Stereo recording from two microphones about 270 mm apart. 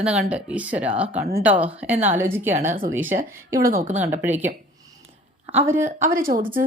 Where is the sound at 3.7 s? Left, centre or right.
Right.